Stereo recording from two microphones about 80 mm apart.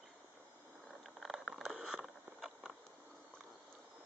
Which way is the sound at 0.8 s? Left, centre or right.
Centre.